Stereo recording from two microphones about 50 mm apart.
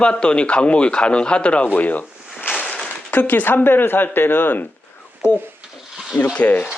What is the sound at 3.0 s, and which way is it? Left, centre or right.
Speech, left.